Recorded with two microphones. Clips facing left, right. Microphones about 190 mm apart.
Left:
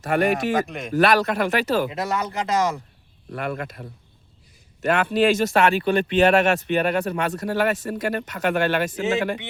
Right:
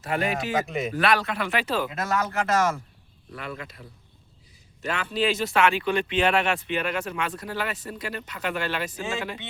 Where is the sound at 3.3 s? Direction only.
55° left (ahead or behind).